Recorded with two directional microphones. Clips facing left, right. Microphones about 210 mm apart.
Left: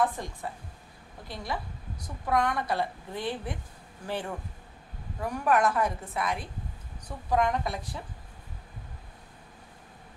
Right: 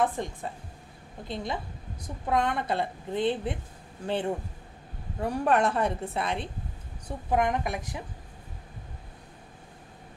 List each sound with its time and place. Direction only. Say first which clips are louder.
0.0 s a woman's voice: right 1 dB; 20° right (ahead or behind)